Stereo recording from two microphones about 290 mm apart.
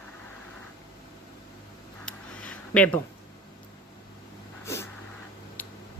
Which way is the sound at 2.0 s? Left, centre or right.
Centre.